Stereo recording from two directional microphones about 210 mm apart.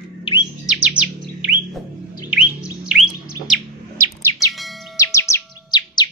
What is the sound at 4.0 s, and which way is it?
Bird, 15° right (ahead or behind).